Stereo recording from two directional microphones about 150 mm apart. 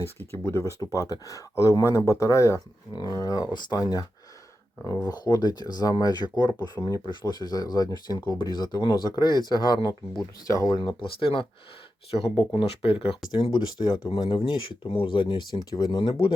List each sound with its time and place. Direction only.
0.0 s speech: 15° left (ahead or behind)
5.0 s speech: 25° left (ahead or behind)
10.8 s speech: 35° left (ahead or behind)